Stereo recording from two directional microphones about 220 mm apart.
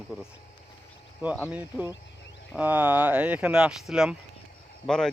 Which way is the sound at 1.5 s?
5° right (ahead or behind).